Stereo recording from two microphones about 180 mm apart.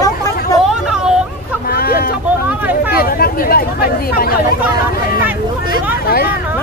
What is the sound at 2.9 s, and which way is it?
Chatter, 55° left (ahead or behind).